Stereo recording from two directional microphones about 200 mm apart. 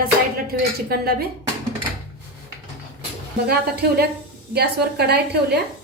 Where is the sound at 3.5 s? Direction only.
50° right (ahead or behind).